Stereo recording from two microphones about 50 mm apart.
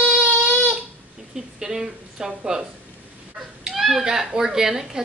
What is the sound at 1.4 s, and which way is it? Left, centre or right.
A woman's voice, centre.